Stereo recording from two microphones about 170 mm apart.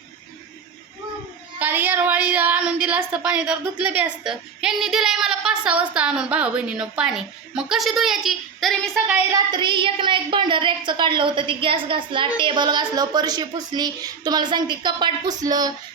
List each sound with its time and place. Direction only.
1.5 s speech: 10° right (ahead or behind)
9.3 s a woman's voice: 25° right (ahead or behind)